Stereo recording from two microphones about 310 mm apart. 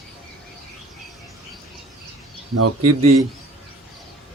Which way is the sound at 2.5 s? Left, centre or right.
Right.